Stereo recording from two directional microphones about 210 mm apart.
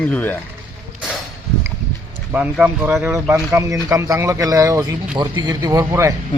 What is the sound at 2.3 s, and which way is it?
Speech, 5° right (ahead or behind).